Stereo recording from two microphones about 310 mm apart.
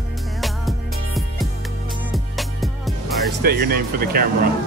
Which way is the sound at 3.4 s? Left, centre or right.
Right.